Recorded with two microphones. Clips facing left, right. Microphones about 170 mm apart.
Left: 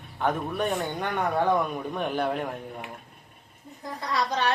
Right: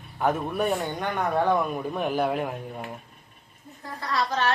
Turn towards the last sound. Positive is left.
turn(degrees=15)  # may be behind; listen again after turning